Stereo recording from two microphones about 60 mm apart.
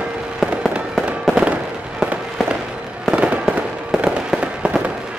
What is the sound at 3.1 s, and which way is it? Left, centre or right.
Fireworks, right.